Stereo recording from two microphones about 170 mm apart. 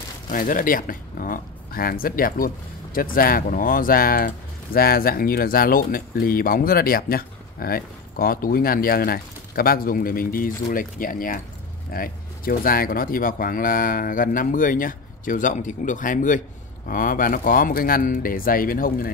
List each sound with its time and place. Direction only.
0.3 s speech: 55° left (ahead or behind)